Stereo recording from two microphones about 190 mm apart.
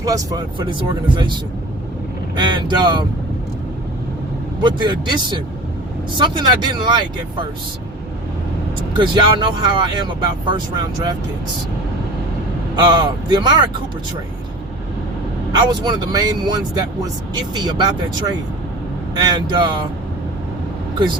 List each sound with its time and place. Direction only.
0.0 s speech: 20° right (ahead or behind)
4.6 s speech: 25° right (ahead or behind)
8.9 s speech: 25° right (ahead or behind)
12.7 s speech: 25° right (ahead or behind)
15.5 s speech: 20° right (ahead or behind)